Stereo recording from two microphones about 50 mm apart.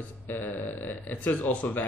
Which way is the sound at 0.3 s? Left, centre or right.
Left.